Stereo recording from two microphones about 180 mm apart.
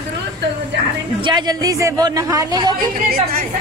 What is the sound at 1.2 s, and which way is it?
Speech, 25° right (ahead or behind).